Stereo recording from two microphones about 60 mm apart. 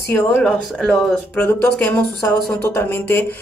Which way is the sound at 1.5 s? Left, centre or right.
Left.